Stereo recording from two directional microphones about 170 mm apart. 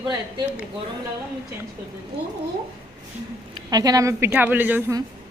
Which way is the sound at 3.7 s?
20° right (ahead or behind).